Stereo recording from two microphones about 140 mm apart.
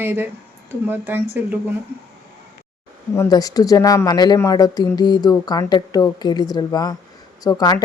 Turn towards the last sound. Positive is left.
turn(degrees=25)  # may be behind; listen again after turning